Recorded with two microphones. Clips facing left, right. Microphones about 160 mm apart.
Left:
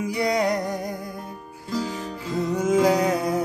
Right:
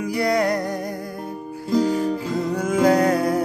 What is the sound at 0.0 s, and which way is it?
Music, 20° left (ahead or behind).